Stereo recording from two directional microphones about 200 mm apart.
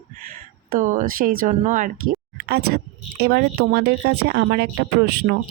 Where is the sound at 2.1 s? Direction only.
55° right (ahead or behind).